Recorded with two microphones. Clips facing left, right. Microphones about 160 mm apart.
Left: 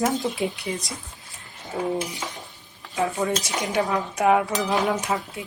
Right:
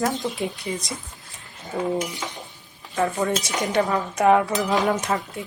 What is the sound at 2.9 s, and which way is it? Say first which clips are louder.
Speech: right 1 dB; 5° left (ahead or behind).